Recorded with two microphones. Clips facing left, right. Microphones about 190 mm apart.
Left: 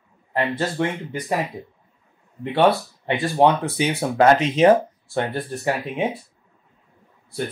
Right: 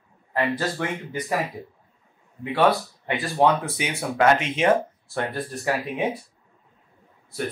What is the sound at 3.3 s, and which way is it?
Speech, 30° left (ahead or behind).